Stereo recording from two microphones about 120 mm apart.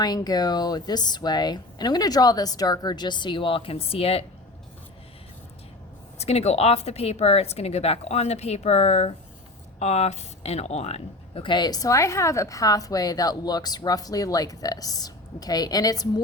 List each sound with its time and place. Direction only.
0.0 s speech: 35° left (ahead or behind); by 4.3 s 55° left (ahead or behind)
6.1 s speech: 60° left (ahead or behind); by 16.2 s 30° left (ahead or behind)